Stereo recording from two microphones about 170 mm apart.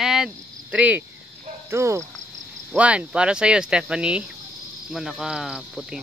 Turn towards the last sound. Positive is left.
turn(degrees=-5)  # may be behind; listen again after turning